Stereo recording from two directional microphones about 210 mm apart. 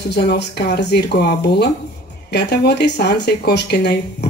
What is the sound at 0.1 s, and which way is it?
Speech, 50° left (ahead or behind).